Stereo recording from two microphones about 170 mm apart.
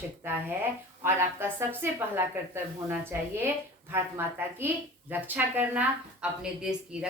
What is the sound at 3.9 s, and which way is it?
A woman's voice, 15° right (ahead or behind).